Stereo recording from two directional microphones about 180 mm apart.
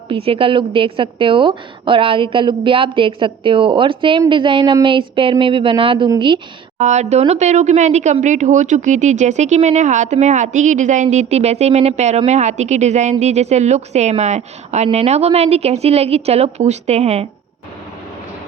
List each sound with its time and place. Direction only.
0.1 s a woman's voice: 30° right (ahead or behind)
6.7 s speech: 40° right (ahead or behind)